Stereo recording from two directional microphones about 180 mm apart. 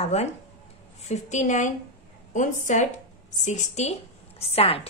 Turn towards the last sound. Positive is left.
turn(degrees=35)  # may be behind; listen again after turning